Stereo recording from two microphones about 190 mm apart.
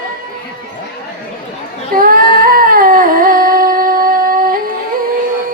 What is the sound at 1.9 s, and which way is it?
Cat, 50° right (ahead or behind).